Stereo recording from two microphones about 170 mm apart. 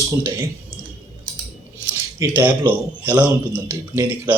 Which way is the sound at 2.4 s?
10° right (ahead or behind).